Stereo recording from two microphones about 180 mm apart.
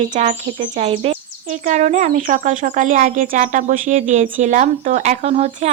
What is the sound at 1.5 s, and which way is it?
Speech, 45° right (ahead or behind).